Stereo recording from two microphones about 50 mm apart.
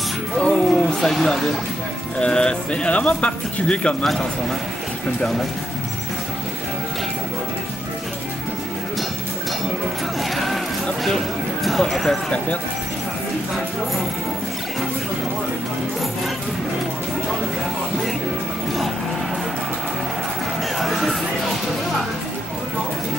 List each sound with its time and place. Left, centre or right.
0.5 s a sound: centre
1.0 s speech: centre
2.1 s speech: centre
10.3 s a sound: centre
11.8 s speech: centre
20.8 s music: centre